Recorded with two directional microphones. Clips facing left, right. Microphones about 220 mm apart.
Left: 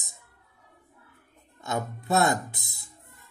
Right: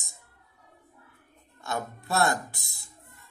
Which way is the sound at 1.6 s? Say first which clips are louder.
Left 2 dB; 20° left (ahead or behind).